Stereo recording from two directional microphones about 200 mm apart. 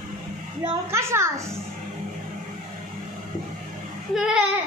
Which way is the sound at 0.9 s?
15° right (ahead or behind).